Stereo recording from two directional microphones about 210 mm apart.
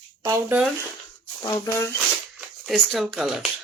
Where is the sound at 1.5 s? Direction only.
15° left (ahead or behind).